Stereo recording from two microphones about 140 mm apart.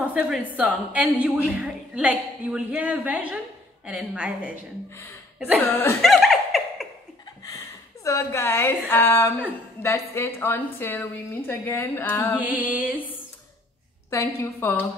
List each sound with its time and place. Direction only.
0.1 s a woman's voice: 10° right (ahead or behind)
5.6 s a woman's voice: 15° left (ahead or behind)
5.9 s laughter: centre (ahead or behind)
7.4 s a woman's voice: 25° left (ahead or behind)
12.4 s a woman's voice: 10° right (ahead or behind)
14.1 s a woman's voice: 15° left (ahead or behind)